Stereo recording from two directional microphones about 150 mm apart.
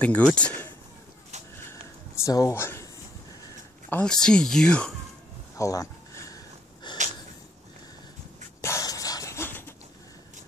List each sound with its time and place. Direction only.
0.0 s speech: 10° left (ahead or behind)
2.2 s speech: 20° left (ahead or behind)
3.9 s speech: 5° left (ahead or behind)
5.6 s a sound: 20° left (ahead or behind)
8.5 s cough: 20° left (ahead or behind)